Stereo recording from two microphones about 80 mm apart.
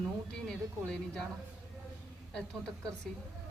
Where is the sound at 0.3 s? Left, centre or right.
Centre.